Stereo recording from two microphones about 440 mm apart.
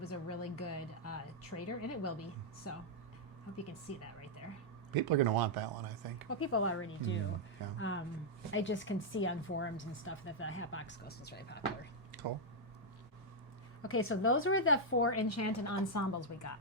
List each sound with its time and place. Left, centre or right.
0.1 s a woman's voice: left
5.0 s speech: right
6.2 s speech: left
12.1 s a sound: right
13.8 s speech: left